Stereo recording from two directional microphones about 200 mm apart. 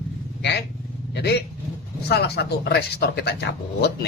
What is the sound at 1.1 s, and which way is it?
Speech, 55° left (ahead or behind).